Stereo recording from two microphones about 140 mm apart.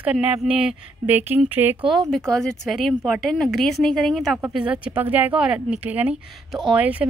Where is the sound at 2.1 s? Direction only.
5° left (ahead or behind).